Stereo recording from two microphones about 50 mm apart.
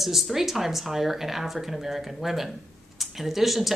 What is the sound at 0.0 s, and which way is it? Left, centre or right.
Speech, centre.